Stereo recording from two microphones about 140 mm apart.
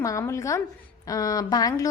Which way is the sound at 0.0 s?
20° left (ahead or behind).